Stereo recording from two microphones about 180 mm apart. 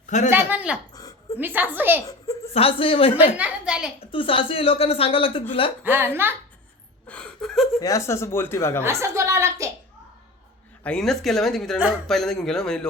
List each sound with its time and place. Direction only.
0.3 s a woman's voice: 10° right (ahead or behind)
2.5 s speech: 30° left (ahead or behind)
3.3 s a woman's voice: 5° right (ahead or behind)
4.1 s a woman's voice: 30° left (ahead or behind)
5.8 s a woman's voice: 10° right (ahead or behind)
7.1 s a sound: 5° left (ahead or behind)
7.8 s speech: 20° left (ahead or behind)
8.8 s a woman's voice: 15° right (ahead or behind)
10.8 s speech: 5° left (ahead or behind)